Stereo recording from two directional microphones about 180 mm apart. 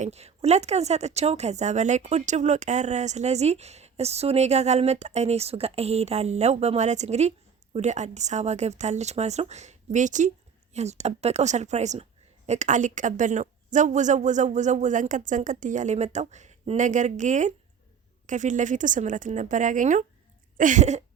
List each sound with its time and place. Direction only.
0.0 s a woman's voice: 35° right (ahead or behind)